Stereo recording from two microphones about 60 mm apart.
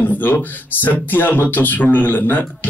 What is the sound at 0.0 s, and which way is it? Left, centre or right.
Speech, left.